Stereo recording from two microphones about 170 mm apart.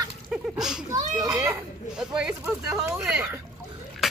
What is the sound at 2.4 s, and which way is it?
Speech, 15° right (ahead or behind).